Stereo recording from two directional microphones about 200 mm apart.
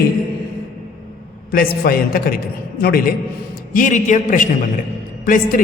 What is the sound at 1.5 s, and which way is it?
A man's voice, 50° left (ahead or behind).